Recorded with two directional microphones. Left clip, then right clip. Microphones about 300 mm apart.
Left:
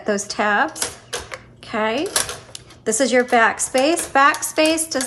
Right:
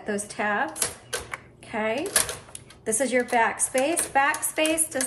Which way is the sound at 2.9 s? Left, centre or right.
Centre.